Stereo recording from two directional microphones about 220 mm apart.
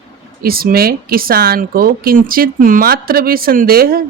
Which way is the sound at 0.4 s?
40° right (ahead or behind).